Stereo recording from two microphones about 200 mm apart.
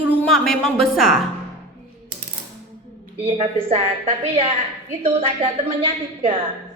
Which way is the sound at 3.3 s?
25° right (ahead or behind).